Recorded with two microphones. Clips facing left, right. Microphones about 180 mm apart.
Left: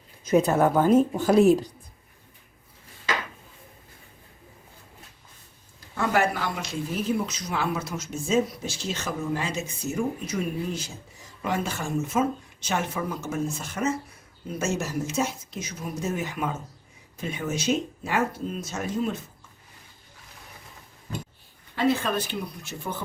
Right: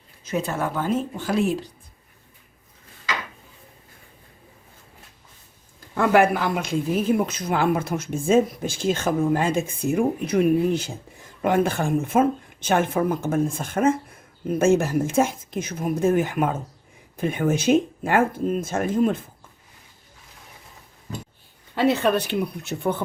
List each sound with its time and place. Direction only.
0.3 s speech: 40° left (ahead or behind)
5.9 s speech: 60° right (ahead or behind)
21.8 s speech: 70° right (ahead or behind)